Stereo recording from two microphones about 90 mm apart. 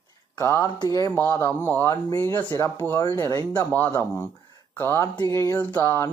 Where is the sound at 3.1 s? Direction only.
35° left (ahead or behind).